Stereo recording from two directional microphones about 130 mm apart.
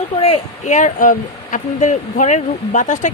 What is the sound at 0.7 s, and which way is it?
Speech, 70° left (ahead or behind).